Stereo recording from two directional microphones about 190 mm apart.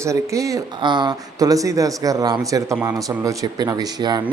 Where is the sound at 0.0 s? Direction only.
15° right (ahead or behind).